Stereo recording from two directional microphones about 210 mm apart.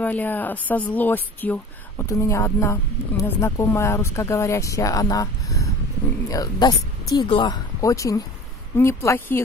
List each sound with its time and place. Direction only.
0.0 s a woman's voice: 10° left (ahead or behind)